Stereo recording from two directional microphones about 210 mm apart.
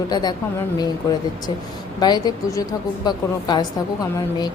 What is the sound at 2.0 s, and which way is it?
A woman's voice, 20° left (ahead or behind).